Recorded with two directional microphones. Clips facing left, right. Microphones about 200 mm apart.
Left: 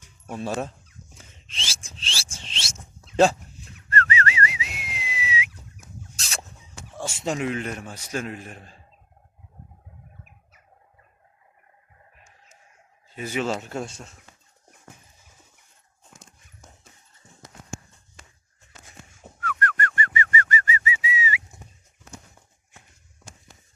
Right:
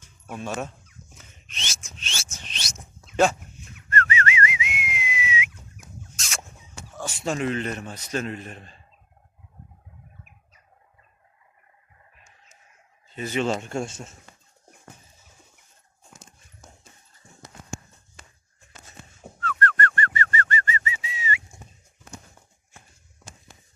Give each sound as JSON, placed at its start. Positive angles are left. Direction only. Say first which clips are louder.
{"t": 0.3, "sound": "speech", "louder": "left 2 dB", "side_deg": 35}
{"t": 1.2, "sound": "a sound", "louder": "even", "side_deg": 30}
{"t": 6.1, "sound": "rodents", "louder": "even", "side_deg": 35}
{"t": 6.9, "sound": "a sound", "louder": "even", "side_deg": 25}
{"t": 7.3, "sound": "a man's voice", "louder": "right 1 dB", "side_deg": 10}
{"t": 13.1, "sound": "speech", "louder": "right 2 dB", "side_deg": 10}
{"t": 19.4, "sound": "whistling", "louder": "right 2 dB", "side_deg": 10}